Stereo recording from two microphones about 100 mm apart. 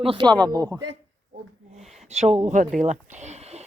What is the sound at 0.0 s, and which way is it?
Speech, 65° right (ahead or behind).